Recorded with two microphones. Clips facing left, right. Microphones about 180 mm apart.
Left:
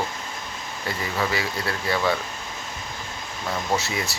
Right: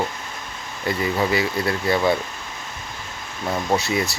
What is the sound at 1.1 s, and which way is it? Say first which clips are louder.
Speech: right 2 dB; 25° right (ahead or behind).